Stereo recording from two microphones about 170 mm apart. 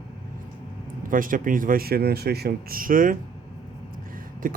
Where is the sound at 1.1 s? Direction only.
55° right (ahead or behind).